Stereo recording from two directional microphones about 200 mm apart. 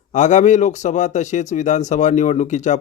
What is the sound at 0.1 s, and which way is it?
Speech, 35° left (ahead or behind).